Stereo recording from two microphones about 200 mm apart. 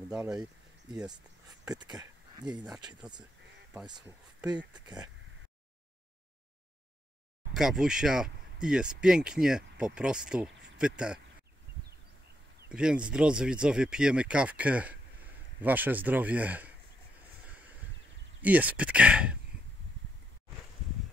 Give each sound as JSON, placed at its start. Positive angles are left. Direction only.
{"t": 0.1, "sound": "speech", "side_deg": -5}
{"t": 1.6, "sound": "speech", "side_deg": -20}
{"t": 7.5, "sound": "speech", "side_deg": -5}
{"t": 12.6, "sound": "speech", "side_deg": -5}
{"t": 18.4, "sound": "speech", "side_deg": -10}